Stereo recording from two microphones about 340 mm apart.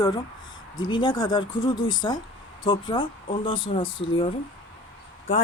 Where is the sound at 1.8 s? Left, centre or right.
Left.